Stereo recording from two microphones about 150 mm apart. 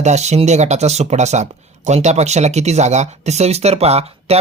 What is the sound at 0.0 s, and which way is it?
Speech, 50° right (ahead or behind).